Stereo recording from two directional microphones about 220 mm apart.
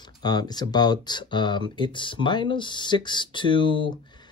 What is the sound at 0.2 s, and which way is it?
Speech, 20° left (ahead or behind).